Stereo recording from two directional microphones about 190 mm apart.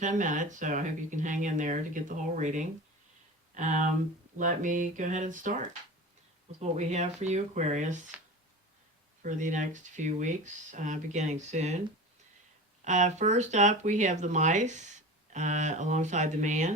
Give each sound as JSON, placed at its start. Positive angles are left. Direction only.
{"t": 0.0, "sound": "speech", "side_deg": -40}
{"t": 9.2, "sound": "speech", "side_deg": -40}
{"t": 12.8, "sound": "speech", "side_deg": -40}